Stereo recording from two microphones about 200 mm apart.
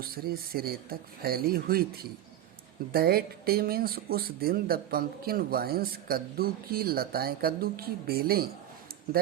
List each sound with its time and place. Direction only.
0.0 s speech: 50° right (ahead or behind)
2.9 s speech: 50° right (ahead or behind)